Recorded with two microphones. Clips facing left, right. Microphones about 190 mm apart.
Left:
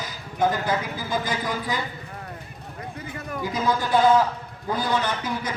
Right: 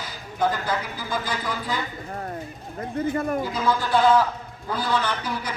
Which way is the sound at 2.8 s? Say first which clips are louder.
Right 11 dB; 50° right (ahead or behind).